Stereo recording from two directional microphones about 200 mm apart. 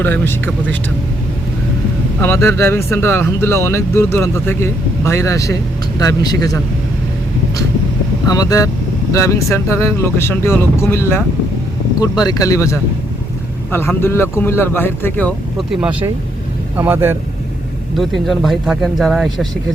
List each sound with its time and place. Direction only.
0.0 s speech: 10° left (ahead or behind)
2.2 s speech: 10° left (ahead or behind)
8.3 s speech: 20° left (ahead or behind)
12.2 s speech: 20° left (ahead or behind)
15.7 s speech: 5° right (ahead or behind)
17.9 s speech: centre (ahead or behind)